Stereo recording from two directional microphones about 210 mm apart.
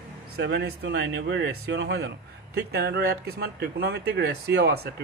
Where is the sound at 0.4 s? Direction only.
55° right (ahead or behind).